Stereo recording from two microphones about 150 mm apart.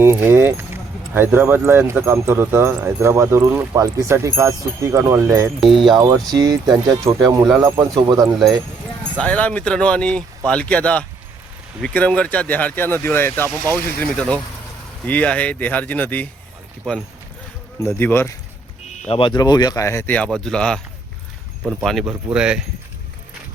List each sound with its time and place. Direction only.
0.0 s speech: 15° right (ahead or behind)
8.4 s speech: centre (ahead or behind)
17.8 s speech: 15° left (ahead or behind)
19.0 s speech: 35° left (ahead or behind); by 20.8 s 5° left (ahead or behind)
21.6 s speech: 5° right (ahead or behind)